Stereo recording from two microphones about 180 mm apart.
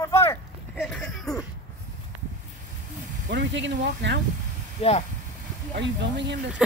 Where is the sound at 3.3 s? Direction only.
75° right (ahead or behind).